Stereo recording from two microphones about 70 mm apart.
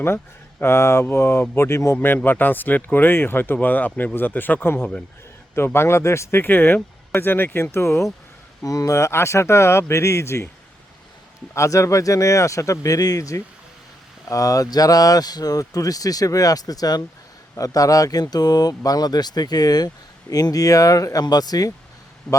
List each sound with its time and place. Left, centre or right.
0.6 s speech: left
2.0 s speech: left
8.6 s speech: left
11.5 s speech: left
20.3 s speech: left
21.2 s speech: left
22.3 s a man's voice: centre